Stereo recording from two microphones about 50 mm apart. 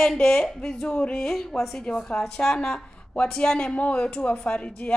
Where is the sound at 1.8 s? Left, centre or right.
Centre.